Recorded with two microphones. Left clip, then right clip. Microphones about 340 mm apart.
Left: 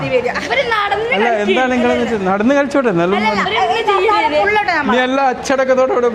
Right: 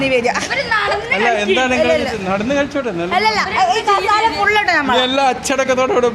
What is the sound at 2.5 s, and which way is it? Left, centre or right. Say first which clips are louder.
Speech: left 6 dB; left.